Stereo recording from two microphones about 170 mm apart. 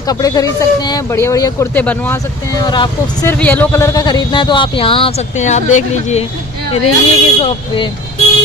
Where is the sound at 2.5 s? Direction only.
25° left (ahead or behind).